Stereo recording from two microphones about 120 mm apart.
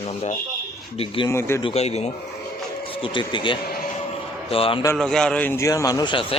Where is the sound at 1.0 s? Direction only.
50° left (ahead or behind).